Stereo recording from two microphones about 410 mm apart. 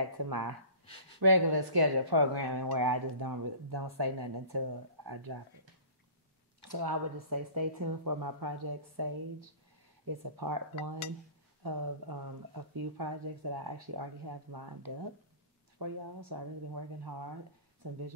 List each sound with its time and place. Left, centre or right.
0.3 s speech: right
6.7 s speech: right